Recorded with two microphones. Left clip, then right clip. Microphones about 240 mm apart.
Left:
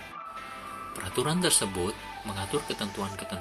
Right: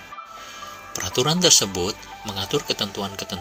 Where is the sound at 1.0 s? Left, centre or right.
Right.